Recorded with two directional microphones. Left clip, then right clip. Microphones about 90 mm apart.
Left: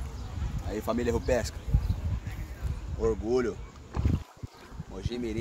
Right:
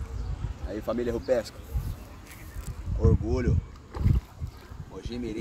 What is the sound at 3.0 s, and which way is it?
Speech, 50° left (ahead or behind).